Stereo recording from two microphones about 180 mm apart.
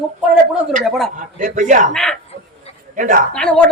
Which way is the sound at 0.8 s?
Centre (ahead or behind).